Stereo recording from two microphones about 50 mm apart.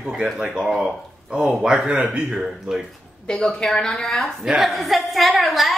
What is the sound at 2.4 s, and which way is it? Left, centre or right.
Speech, centre.